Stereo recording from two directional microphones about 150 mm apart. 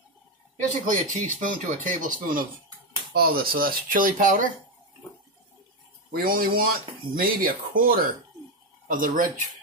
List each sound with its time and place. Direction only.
0.8 s speech: 55° right (ahead or behind)
3.1 s speech: 80° right; by 4.5 s 65° right (ahead or behind)
6.1 s speech: 75° right (ahead or behind)